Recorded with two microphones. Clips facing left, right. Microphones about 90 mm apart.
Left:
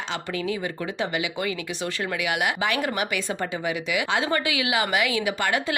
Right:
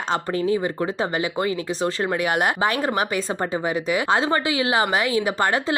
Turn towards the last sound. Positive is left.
turn(degrees=-35)  # may be behind; listen again after turning